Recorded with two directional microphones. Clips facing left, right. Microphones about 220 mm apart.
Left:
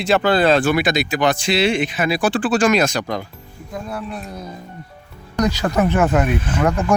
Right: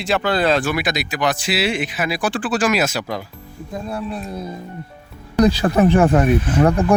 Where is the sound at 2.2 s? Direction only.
30° left (ahead or behind).